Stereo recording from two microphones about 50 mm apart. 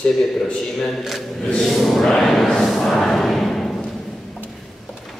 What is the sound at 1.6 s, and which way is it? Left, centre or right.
Music, centre.